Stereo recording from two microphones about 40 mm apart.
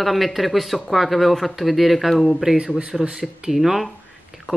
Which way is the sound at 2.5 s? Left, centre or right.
Centre.